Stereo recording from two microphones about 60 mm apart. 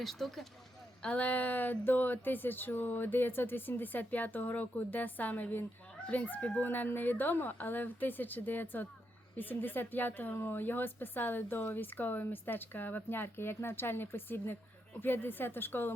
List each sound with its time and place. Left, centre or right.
0.0 s speech: centre
1.0 s speech: left